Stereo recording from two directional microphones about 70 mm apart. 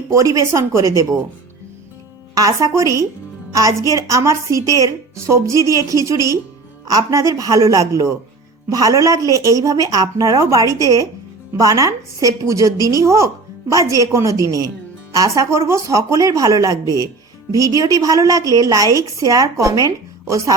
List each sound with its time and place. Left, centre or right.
0.1 s a woman's voice: right
2.3 s a woman's voice: right